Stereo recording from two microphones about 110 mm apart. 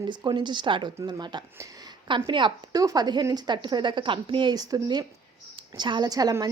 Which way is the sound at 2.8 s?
35° right (ahead or behind).